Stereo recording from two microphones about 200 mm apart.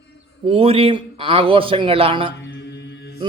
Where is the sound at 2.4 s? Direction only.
60° left (ahead or behind).